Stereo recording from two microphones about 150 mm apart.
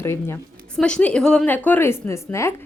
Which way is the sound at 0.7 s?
5° left (ahead or behind).